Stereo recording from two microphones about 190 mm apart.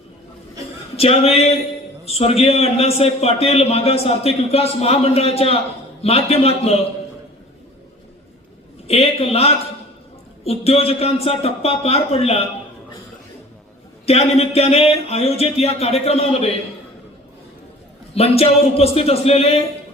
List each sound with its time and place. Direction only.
0.9 s a man's voice: 30° left (ahead or behind)
8.9 s a man's voice: 30° left (ahead or behind)
14.0 s a man's voice: 30° left (ahead or behind)
18.1 s a man's voice: 30° left (ahead or behind)